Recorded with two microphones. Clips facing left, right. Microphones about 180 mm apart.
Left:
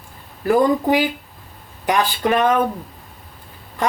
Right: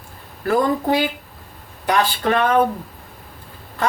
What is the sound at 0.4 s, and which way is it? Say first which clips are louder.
Speech: left 3 dB; 15° left (ahead or behind).